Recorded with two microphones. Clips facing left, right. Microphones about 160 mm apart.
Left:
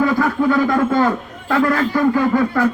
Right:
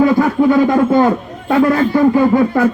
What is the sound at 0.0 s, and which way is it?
A man's voice, 25° right (ahead or behind).